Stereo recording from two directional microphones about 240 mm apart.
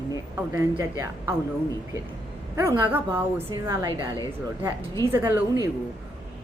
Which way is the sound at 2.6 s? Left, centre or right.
Centre.